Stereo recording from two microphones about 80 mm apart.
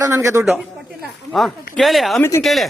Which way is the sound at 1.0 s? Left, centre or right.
Centre.